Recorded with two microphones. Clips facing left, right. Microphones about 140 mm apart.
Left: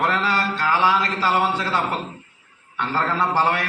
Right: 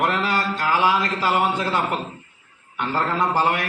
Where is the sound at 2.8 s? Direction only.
15° right (ahead or behind).